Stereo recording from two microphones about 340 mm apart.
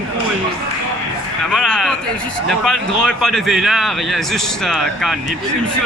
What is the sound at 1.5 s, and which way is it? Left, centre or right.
A man's voice, centre.